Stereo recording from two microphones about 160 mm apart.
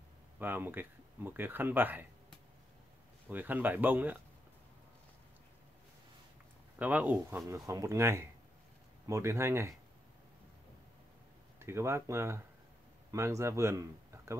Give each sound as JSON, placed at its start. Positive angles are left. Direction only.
{"t": 0.4, "sound": "speech", "side_deg": -10}
{"t": 3.3, "sound": "speech", "side_deg": -10}
{"t": 6.8, "sound": "speech", "side_deg": -10}
{"t": 11.6, "sound": "speech", "side_deg": -15}